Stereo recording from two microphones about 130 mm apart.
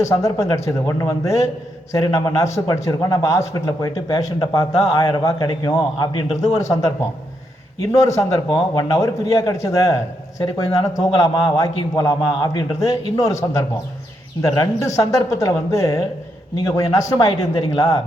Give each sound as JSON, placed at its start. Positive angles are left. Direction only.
{"t": 0.0, "sound": "a man's voice", "side_deg": 25}
{"t": 6.3, "sound": "a man's voice", "side_deg": 60}
{"t": 6.6, "sound": "a man's voice", "side_deg": 25}